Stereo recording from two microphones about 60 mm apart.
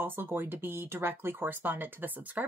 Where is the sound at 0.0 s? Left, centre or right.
Right.